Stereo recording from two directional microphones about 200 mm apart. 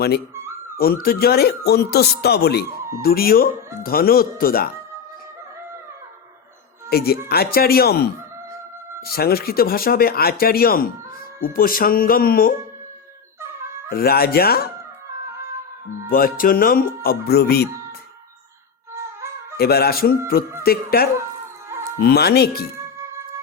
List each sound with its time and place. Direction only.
1.0 s speech: 50° left (ahead or behind)
6.9 s speech: 50° left (ahead or behind)
13.9 s speech: 50° left (ahead or behind)
16.0 s speech: 45° left (ahead or behind)
19.5 s speech: 50° left (ahead or behind)
21.7 s music: 15° right (ahead or behind)
22.0 s speech: 50° left (ahead or behind)